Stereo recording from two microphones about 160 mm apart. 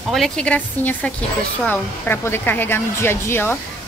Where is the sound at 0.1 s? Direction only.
5° left (ahead or behind).